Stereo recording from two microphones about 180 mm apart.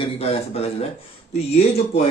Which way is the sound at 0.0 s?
35° left (ahead or behind).